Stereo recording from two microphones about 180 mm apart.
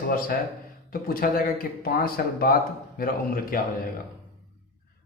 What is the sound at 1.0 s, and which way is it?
Speech, 55° left (ahead or behind).